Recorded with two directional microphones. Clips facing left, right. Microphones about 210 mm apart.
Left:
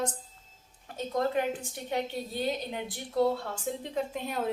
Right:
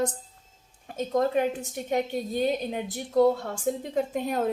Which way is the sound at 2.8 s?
40° right (ahead or behind).